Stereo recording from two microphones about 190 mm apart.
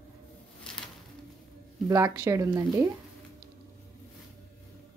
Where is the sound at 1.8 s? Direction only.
20° right (ahead or behind).